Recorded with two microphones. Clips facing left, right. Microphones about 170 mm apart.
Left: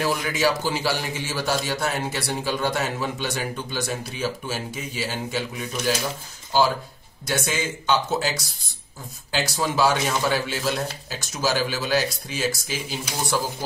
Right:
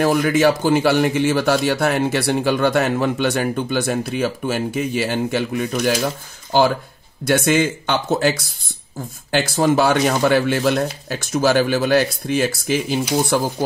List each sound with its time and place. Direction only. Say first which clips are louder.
0.0 s a man's voice: right 8 dB; 50° right (ahead or behind)